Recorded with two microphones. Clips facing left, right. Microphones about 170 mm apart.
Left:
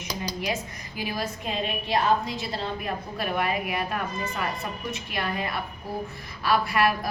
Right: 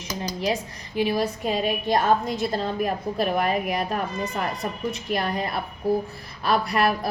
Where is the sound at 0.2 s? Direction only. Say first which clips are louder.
Right 5 dB; 35° right (ahead or behind).